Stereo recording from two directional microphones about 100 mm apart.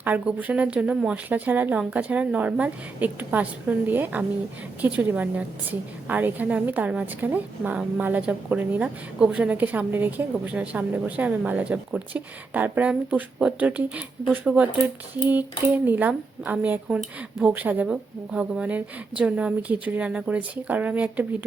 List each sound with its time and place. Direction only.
0.0 s a woman's voice: 15° right (ahead or behind)